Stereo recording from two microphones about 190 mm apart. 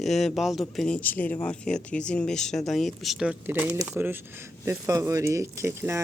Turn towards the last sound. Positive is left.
turn(degrees=-15)  # may be behind; listen again after turning